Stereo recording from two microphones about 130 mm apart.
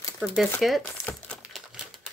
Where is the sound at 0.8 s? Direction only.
10° left (ahead or behind).